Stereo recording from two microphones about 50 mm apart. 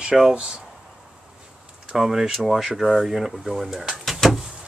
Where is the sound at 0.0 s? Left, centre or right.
Centre.